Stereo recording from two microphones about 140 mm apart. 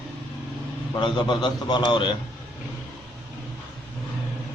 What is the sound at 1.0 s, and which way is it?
A man's voice, 35° left (ahead or behind).